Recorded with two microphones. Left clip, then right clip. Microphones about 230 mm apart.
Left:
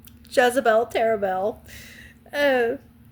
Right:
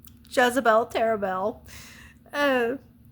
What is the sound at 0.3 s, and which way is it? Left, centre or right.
A woman's voice, centre.